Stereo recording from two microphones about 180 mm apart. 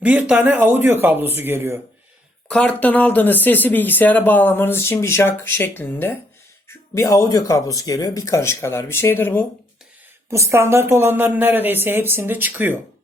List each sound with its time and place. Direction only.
0.0 s speech: 10° right (ahead or behind)
2.5 s speech: 5° left (ahead or behind)
10.2 s speech: 15° right (ahead or behind)